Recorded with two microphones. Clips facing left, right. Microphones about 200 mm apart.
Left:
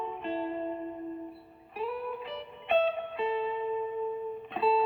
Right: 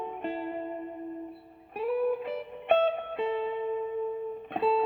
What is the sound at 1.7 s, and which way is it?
Music, 55° right (ahead or behind).